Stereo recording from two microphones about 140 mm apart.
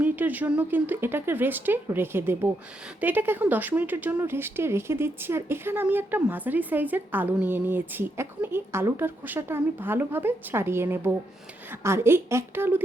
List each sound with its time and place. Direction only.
0.0 s speech: 10° right (ahead or behind)